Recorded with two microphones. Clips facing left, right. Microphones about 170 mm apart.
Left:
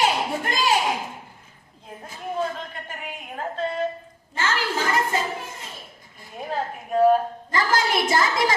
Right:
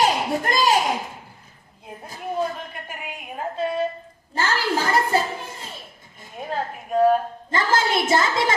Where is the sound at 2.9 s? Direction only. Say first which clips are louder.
Right 1 dB; 10° right (ahead or behind).